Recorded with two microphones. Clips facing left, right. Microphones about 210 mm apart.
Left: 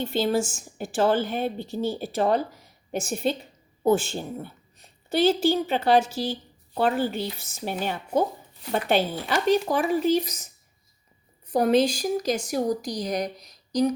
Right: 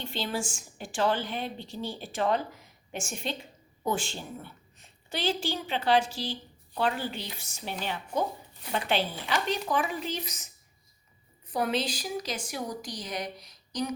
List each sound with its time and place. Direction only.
0.2 s a woman's voice: 40° left (ahead or behind)
11.5 s speech: 45° left (ahead or behind)